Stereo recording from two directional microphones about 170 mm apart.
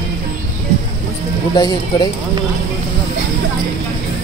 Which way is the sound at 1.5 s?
25° left (ahead or behind).